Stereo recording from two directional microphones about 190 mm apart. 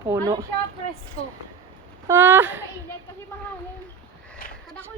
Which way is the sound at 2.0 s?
10° right (ahead or behind).